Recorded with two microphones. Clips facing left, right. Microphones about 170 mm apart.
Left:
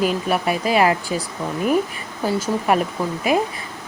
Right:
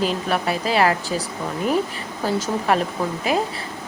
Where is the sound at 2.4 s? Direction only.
10° left (ahead or behind).